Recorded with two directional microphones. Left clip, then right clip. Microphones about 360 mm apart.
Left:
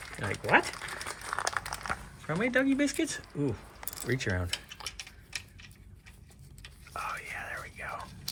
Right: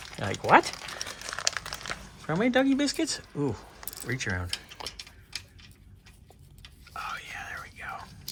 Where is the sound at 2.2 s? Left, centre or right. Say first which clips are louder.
Right 4 dB; centre.